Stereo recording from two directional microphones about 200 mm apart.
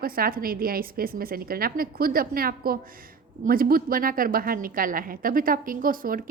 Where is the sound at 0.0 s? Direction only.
45° right (ahead or behind).